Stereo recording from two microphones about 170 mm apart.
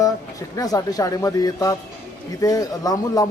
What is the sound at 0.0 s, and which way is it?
Speech, 20° left (ahead or behind).